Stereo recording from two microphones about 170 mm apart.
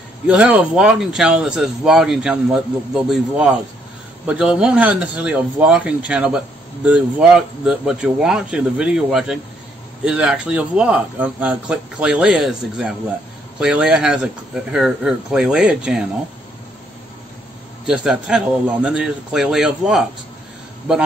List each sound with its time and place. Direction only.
0.3 s speech: 5° right (ahead or behind)
17.8 s speech: 5° right (ahead or behind)